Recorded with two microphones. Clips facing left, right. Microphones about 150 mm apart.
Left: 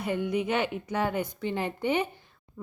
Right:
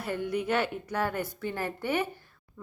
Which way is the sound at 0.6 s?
15° left (ahead or behind).